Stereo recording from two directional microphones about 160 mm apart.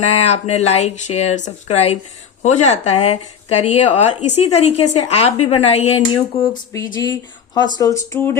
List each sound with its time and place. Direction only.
0.0 s speech: 40° left (ahead or behind); by 8.4 s 15° left (ahead or behind)